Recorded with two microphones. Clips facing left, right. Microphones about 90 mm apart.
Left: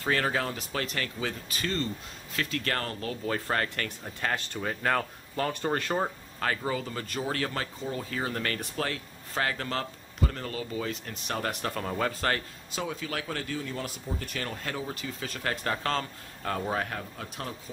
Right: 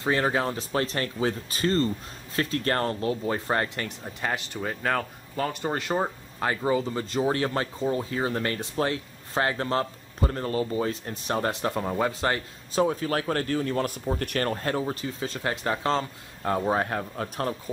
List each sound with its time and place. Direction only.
0.0 s speech: 25° right (ahead or behind)
8.0 s speech: 20° right (ahead or behind)
12.7 s speech: 40° right (ahead or behind); by 14.5 s 60° right (ahead or behind)
14.5 s speech: 40° right (ahead or behind)
17.2 s speech: 45° right (ahead or behind)